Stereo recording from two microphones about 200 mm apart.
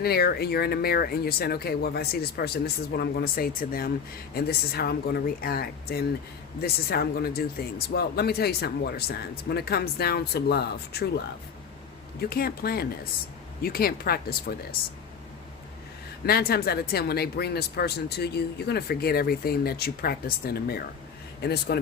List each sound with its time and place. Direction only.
0.0 s speech: 50° left (ahead or behind)
12.3 s speech: 50° left (ahead or behind)
16.2 s speech: 50° left (ahead or behind)